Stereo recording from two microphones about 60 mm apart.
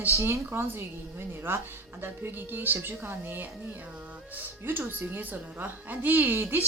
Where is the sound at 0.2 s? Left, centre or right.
Right.